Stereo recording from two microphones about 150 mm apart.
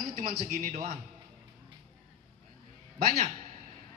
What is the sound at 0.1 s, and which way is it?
Speech, 60° right (ahead or behind).